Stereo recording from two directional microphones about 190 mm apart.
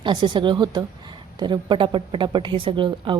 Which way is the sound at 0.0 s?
25° right (ahead or behind).